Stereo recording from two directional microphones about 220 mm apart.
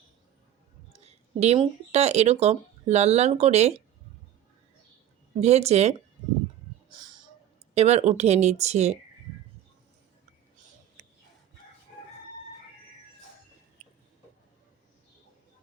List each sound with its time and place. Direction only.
1.0 s speech: 30° right (ahead or behind)
5.4 s speech: 30° right (ahead or behind)
7.7 s speech: 30° right (ahead or behind)